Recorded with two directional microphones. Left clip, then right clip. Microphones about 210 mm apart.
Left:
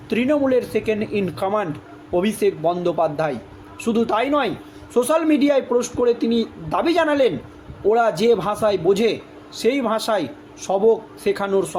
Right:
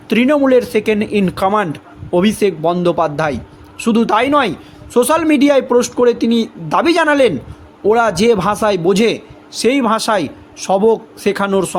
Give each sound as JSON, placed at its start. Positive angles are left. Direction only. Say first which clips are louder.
{"t": 0.1, "sound": "a man's voice", "louder": "right 7 dB", "side_deg": -45}